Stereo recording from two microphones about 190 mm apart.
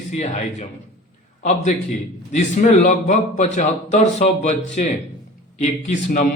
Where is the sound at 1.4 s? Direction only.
35° left (ahead or behind).